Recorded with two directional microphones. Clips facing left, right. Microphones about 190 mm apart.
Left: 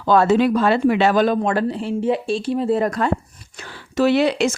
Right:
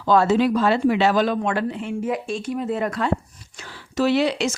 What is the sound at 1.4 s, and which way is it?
Speech, 35° left (ahead or behind).